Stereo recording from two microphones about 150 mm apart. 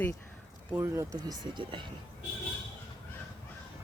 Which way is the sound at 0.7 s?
20° right (ahead or behind).